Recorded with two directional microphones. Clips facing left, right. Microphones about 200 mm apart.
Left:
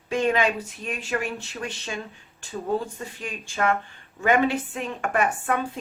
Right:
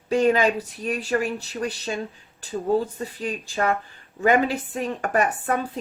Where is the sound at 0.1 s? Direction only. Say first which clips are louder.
Right 4 dB; 35° right (ahead or behind).